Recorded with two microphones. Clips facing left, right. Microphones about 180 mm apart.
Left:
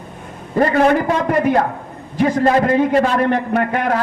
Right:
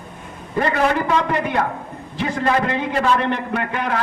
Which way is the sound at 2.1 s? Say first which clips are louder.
Left 6 dB; 45° left (ahead or behind).